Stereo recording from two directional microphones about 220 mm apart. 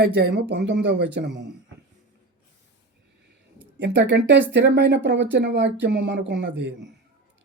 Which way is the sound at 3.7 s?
55° right (ahead or behind).